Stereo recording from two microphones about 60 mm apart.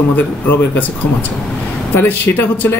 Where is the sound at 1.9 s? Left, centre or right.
Left.